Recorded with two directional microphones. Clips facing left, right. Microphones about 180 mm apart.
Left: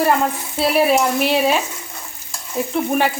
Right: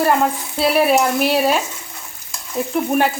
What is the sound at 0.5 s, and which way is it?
Speech, centre (ahead or behind).